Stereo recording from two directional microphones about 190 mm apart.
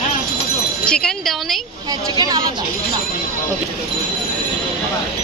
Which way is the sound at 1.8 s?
20° right (ahead or behind).